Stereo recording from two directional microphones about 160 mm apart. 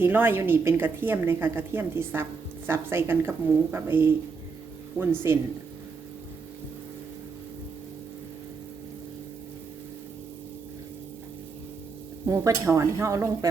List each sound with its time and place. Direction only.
0.0 s a woman's voice: 15° right (ahead or behind)
12.2 s a woman's voice: 15° right (ahead or behind)